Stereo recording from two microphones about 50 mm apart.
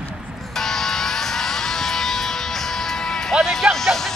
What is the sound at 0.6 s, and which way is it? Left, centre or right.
Music, centre.